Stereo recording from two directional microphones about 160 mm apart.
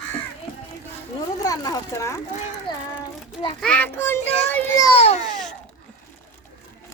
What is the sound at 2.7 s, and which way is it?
Child singing, 30° left (ahead or behind).